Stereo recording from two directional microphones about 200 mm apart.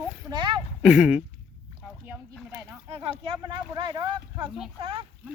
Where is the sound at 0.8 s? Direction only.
5° right (ahead or behind).